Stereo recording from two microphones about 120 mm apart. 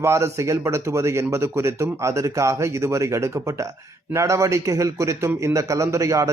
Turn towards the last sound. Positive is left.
turn(degrees=-25)  # may be behind; listen again after turning